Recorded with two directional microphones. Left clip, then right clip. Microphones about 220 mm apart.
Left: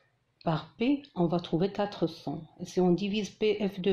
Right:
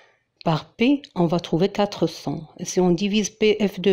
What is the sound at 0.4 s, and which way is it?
Speech, 50° right (ahead or behind).